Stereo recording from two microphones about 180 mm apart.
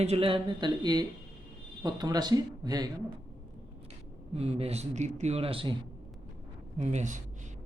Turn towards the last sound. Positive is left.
turn(degrees=-40)  # may be behind; listen again after turning